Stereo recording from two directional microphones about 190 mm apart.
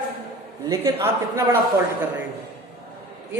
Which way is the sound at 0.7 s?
15° right (ahead or behind).